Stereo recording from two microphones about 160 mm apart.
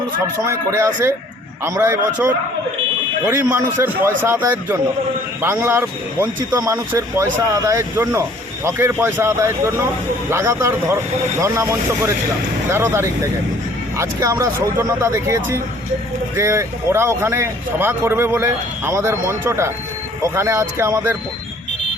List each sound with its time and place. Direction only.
0.4 s speech: 15° right (ahead or behind)